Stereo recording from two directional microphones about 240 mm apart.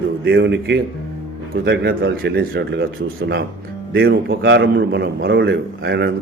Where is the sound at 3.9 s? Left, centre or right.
Right.